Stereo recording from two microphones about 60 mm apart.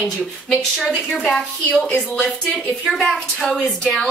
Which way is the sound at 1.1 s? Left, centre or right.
Centre.